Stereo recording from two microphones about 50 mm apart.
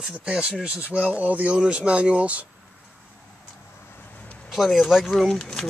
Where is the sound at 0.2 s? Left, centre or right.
Centre.